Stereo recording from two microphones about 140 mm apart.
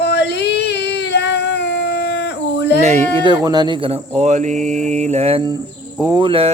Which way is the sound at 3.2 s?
30° right (ahead or behind).